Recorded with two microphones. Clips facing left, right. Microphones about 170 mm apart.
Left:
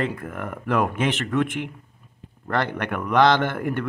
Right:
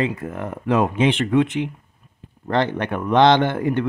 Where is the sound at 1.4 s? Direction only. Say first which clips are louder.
Right 4 dB; 50° left (ahead or behind).